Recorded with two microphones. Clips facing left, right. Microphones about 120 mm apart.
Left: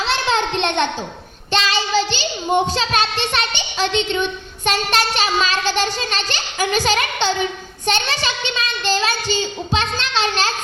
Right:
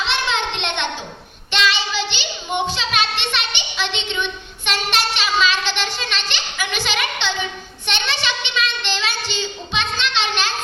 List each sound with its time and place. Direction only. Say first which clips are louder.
0.0 s a sound: left 3 dB; 40° left (ahead or behind)
1.5 s child singing: left 1 dB; 40° left (ahead or behind)
7.9 s a child's voice: left 4 dB; 40° left (ahead or behind)